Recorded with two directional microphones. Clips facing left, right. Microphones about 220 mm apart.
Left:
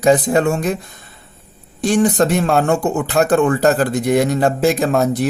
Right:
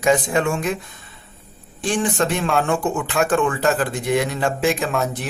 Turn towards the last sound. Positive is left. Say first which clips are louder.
# left 7 dB
turn(degrees=40)  # may be behind; listen again after turning